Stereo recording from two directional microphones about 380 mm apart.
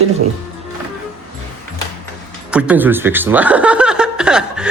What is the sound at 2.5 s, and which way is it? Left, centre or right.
Speech, centre.